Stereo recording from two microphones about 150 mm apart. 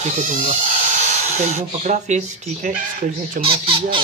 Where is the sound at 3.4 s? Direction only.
35° right (ahead or behind).